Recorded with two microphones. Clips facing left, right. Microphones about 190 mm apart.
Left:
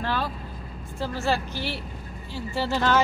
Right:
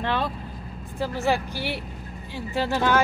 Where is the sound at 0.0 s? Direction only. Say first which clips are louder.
Right 2 dB; 20° right (ahead or behind).